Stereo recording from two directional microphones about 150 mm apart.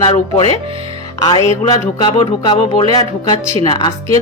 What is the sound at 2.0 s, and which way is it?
A woman's voice, 30° left (ahead or behind).